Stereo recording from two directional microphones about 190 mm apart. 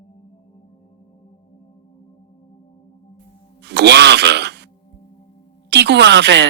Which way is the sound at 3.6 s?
60° right (ahead or behind).